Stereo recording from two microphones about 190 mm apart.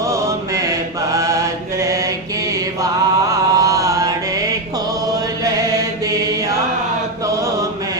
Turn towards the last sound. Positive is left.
turn(degrees=-20)  # may be behind; listen again after turning